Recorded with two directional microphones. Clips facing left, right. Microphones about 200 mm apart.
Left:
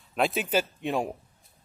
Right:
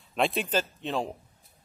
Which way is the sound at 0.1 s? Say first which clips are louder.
Left 1 dB; 5° left (ahead or behind).